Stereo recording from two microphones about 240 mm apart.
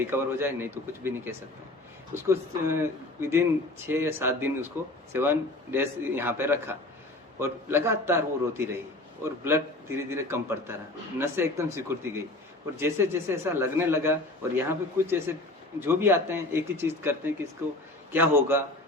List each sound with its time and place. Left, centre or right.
0.0 s a man's voice: centre